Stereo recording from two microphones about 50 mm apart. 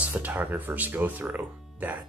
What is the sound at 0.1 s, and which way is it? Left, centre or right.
Speech, right.